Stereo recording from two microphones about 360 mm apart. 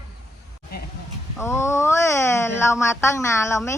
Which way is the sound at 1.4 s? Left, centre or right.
Centre.